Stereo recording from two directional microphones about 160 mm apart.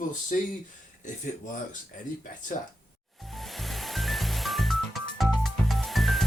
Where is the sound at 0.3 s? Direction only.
50° left (ahead or behind).